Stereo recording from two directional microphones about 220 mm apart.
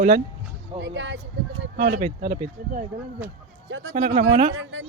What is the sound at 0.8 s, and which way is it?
Speech, 55° right (ahead or behind).